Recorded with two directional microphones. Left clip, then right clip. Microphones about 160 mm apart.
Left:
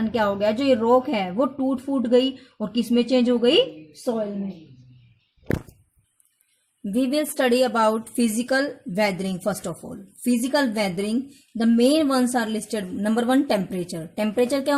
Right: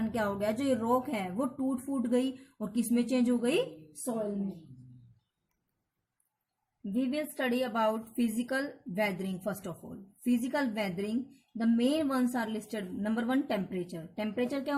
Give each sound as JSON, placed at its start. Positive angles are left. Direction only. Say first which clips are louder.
{"t": 0.0, "sound": "speech", "louder": "left 10 dB", "side_deg": 40}
{"t": 6.9, "sound": "a woman's voice", "louder": "left 11 dB", "side_deg": 55}